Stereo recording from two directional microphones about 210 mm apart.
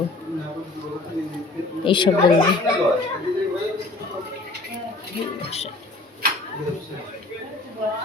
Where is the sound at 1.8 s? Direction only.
25° left (ahead or behind).